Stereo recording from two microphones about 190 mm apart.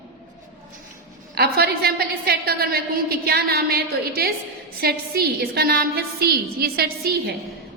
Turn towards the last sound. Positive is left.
turn(degrees=-55)  # may be behind; listen again after turning